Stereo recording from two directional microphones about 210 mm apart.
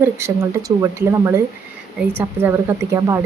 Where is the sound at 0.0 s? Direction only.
15° right (ahead or behind).